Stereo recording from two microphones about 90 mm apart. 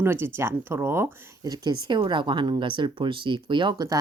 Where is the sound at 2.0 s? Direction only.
65° right (ahead or behind).